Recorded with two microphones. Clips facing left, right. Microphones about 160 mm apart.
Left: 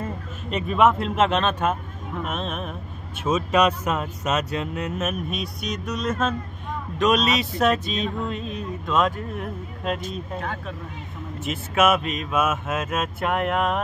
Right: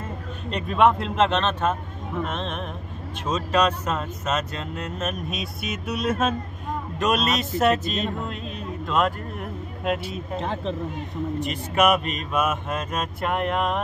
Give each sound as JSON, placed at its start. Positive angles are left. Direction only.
{"t": 0.5, "sound": "speech", "side_deg": 5}
{"t": 5.3, "sound": "music", "side_deg": 0}
{"t": 10.4, "sound": "speech", "side_deg": -25}
{"t": 11.3, "sound": "music", "side_deg": 5}